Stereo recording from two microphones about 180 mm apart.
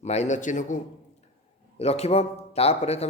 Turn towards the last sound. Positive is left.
turn(degrees=35)  # may be behind; listen again after turning